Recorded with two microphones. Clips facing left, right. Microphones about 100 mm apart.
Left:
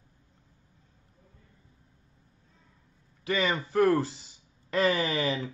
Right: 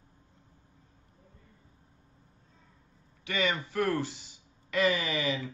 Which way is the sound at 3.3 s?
35° left (ahead or behind).